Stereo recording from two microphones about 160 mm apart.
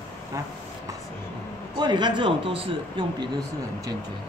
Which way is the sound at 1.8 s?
30° right (ahead or behind).